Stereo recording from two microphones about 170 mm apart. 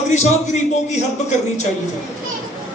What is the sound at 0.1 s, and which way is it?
Speech, 45° left (ahead or behind).